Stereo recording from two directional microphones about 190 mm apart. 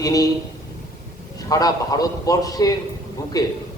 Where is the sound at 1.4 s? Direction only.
20° left (ahead or behind).